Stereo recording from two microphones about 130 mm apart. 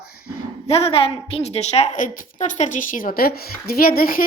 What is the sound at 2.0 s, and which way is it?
A woman's voice, 80° left.